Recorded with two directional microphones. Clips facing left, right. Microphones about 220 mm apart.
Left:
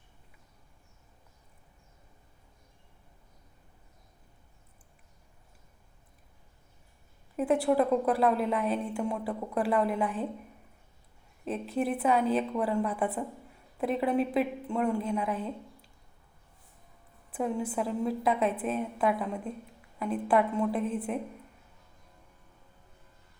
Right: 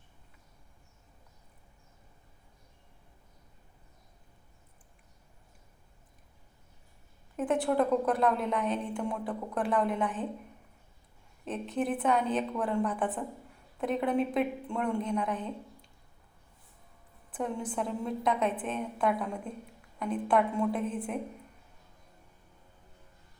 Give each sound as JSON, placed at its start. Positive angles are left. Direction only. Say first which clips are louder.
{"t": 7.3, "sound": "a woman's voice", "louder": "left 2 dB", "side_deg": 5}
{"t": 11.4, "sound": "a woman's voice", "louder": "left 1 dB", "side_deg": 5}
{"t": 17.7, "sound": "a woman's voice", "louder": "left 3 dB", "side_deg": 5}
{"t": 20.7, "sound": "a woman's voice", "louder": "left 2 dB", "side_deg": -5}